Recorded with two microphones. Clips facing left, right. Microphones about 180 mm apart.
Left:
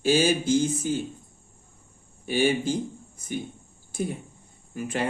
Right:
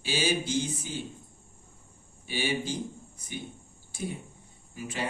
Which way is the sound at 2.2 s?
50° left (ahead or behind).